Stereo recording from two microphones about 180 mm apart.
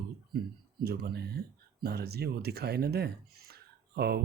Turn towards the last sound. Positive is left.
turn(degrees=-60)  # may be behind; listen again after turning